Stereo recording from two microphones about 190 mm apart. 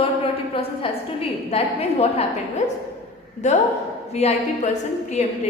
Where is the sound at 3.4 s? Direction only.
40° left (ahead or behind).